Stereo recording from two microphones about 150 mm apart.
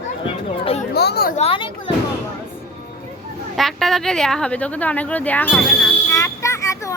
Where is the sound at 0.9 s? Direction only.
90° left.